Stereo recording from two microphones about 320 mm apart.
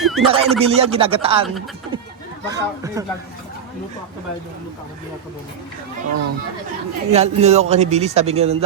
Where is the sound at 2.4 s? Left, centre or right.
Centre.